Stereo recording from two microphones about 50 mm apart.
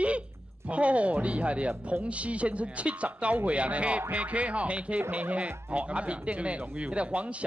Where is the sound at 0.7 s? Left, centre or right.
Right.